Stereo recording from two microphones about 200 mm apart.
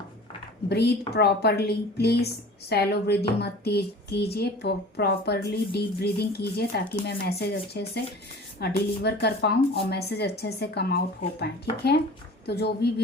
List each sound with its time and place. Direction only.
0.7 s a woman's voice: 55° left (ahead or behind)